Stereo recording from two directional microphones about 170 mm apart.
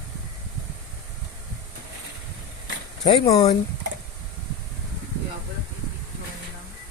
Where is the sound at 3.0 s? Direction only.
25° left (ahead or behind).